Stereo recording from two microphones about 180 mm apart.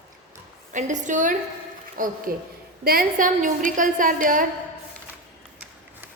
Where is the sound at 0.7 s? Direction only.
45° right (ahead or behind).